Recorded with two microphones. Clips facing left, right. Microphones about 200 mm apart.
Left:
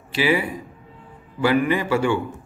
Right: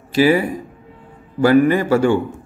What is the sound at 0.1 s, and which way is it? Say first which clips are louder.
A man's voice: right 7 dB; 45° right (ahead or behind).